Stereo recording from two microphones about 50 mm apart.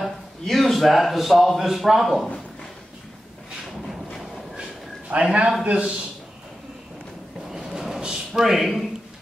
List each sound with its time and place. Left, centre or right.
0.0 s a man's voice: centre
5.1 s a man's voice: right
7.5 s a sound: centre